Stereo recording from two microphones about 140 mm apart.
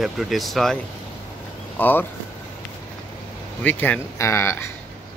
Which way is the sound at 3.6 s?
10° left (ahead or behind).